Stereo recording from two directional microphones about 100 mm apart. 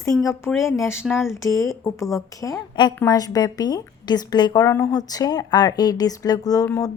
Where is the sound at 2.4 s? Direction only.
45° left (ahead or behind).